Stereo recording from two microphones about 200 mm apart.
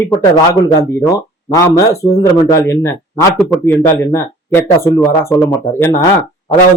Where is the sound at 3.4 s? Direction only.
Centre (ahead or behind).